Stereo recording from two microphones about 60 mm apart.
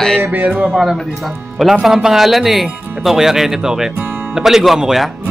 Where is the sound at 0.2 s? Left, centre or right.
Right.